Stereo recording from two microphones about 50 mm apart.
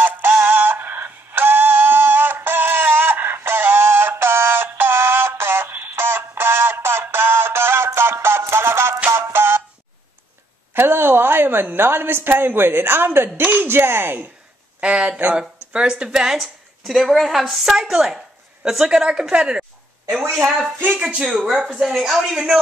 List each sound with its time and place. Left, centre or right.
0.0 s synthetic singing: right
6.0 s synthetic singing: right
9.1 s music: right
10.7 s a woman's voice: right
14.8 s speech: right
20.4 s speech: centre
21.6 s speech: centre